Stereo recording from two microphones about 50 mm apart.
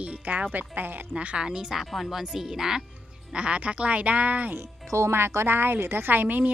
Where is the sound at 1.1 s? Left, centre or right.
Right.